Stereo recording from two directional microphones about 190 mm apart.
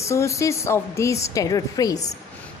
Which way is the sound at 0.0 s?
15° left (ahead or behind).